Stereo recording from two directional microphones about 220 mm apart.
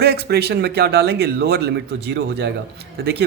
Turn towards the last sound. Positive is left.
turn(degrees=-50)  # may be behind; listen again after turning